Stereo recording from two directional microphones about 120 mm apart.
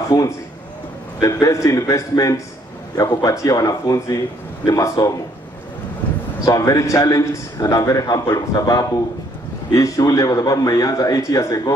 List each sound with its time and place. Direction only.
1.2 s a man's voice: 25° left (ahead or behind)
6.4 s a man's voice: 30° left (ahead or behind)